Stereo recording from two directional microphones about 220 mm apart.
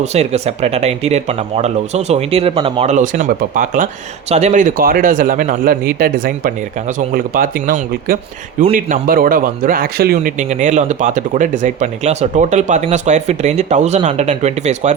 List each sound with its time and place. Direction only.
0.0 s a man's voice: 30° right (ahead or behind)